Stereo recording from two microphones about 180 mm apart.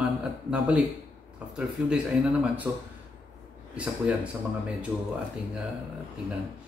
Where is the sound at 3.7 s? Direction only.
5° right (ahead or behind).